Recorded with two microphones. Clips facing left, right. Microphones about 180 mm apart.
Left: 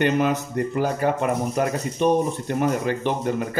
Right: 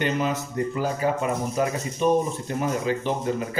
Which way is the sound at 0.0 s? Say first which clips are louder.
Left 4 dB; 65° left (ahead or behind).